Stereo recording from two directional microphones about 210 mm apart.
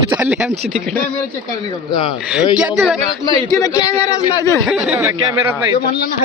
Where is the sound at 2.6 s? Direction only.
5° right (ahead or behind).